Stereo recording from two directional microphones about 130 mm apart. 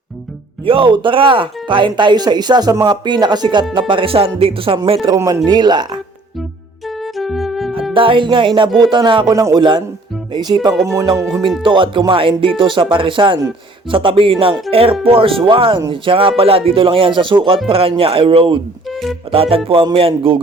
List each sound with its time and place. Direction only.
0.6 s speech: 45° right (ahead or behind)
5.0 s music: 25° right (ahead or behind)
5.5 s speech: 35° right (ahead or behind)
7.0 s music: centre (ahead or behind)
7.9 s speech: 40° right (ahead or behind)
9.3 s speech: 25° right (ahead or behind)
10.8 s music: 25° right (ahead or behind)
11.6 s speech: 40° right (ahead or behind)